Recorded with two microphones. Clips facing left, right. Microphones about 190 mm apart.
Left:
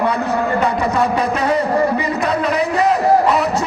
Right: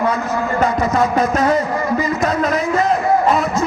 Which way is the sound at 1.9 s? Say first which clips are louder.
Right 1 dB; 65° left (ahead or behind).